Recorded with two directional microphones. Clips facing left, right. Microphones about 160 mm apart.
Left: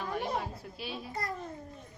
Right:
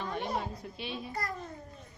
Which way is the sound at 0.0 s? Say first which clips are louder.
Even; 5° left (ahead or behind).